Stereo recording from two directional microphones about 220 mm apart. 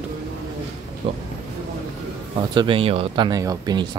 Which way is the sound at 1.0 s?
25° right (ahead or behind).